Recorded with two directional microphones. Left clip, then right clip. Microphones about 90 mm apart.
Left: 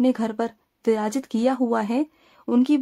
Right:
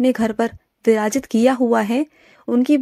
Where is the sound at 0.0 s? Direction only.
30° right (ahead or behind).